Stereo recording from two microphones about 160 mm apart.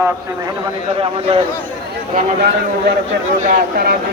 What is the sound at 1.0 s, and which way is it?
Speech, 35° right (ahead or behind).